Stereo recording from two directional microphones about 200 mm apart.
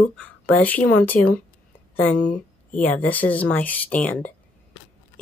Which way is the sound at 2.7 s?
10° left (ahead or behind).